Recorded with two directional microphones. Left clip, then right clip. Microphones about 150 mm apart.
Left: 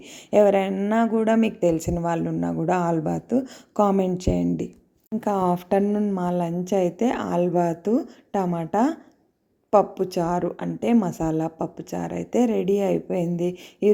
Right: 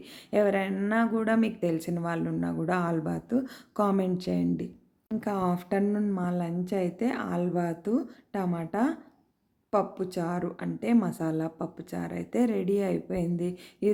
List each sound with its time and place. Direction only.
0.3 s speech: 25° left (ahead or behind)
6.1 s speech: 20° left (ahead or behind)